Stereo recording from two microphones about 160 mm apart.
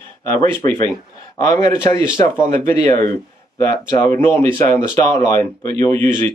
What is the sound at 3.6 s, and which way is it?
Speech, 15° left (ahead or behind).